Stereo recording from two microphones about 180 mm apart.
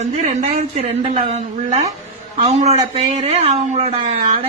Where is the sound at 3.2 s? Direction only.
35° right (ahead or behind).